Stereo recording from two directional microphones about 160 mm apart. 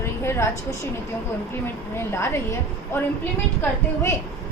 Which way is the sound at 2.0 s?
15° left (ahead or behind).